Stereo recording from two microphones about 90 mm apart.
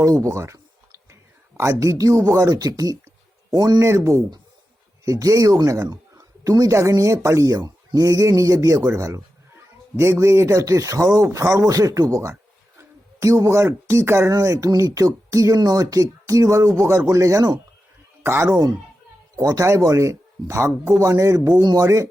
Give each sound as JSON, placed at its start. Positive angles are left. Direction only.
{"t": 0.0, "sound": "speech", "side_deg": -35}
{"t": 3.8, "sound": "speech", "side_deg": -30}
{"t": 18.2, "sound": "speech", "side_deg": -30}
{"t": 21.6, "sound": "speech", "side_deg": -50}